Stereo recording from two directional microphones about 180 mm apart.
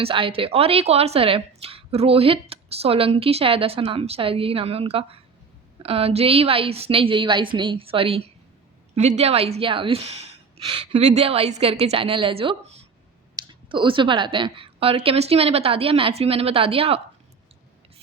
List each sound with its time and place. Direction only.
0.0 s a woman's voice: 30° right (ahead or behind)